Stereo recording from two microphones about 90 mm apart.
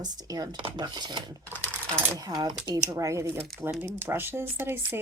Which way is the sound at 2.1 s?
45° right (ahead or behind).